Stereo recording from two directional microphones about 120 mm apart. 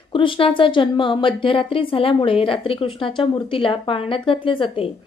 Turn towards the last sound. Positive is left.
turn(degrees=45)  # may be behind; listen again after turning